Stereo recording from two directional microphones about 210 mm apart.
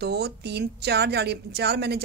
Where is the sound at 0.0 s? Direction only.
50° right (ahead or behind).